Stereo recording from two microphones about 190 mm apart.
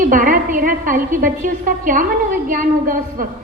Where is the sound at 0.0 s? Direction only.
45° right (ahead or behind).